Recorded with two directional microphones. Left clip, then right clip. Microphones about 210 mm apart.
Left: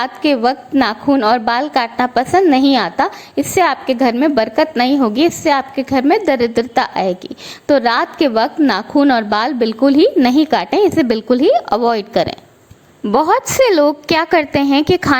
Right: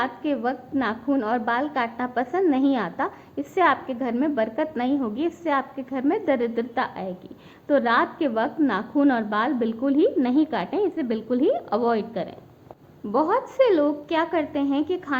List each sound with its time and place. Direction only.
0.0 s a woman's voice: 35° left (ahead or behind)